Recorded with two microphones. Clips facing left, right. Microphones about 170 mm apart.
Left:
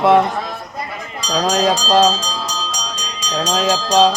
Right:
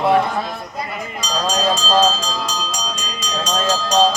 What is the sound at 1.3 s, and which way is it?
Speech, 75° left (ahead or behind).